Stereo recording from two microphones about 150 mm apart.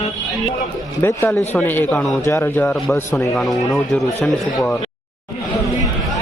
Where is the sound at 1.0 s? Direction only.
15° left (ahead or behind).